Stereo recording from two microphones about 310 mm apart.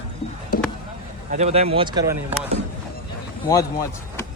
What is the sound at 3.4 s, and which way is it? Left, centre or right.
Speech, centre.